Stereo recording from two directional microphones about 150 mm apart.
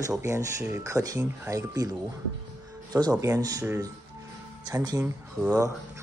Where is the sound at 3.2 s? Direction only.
20° right (ahead or behind).